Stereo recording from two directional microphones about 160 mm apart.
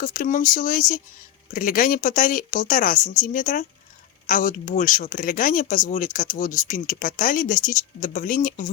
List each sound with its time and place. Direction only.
0.0 s speech: 60° left (ahead or behind)